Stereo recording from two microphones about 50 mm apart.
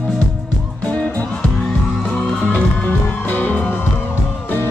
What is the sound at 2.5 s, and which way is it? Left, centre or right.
Music, left.